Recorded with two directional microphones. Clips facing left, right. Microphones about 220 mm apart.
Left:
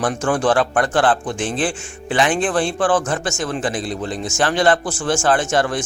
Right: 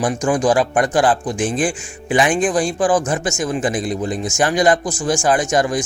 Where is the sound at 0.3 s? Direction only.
10° right (ahead or behind).